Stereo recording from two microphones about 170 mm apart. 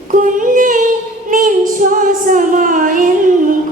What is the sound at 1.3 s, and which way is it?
Female singing, 50° right (ahead or behind).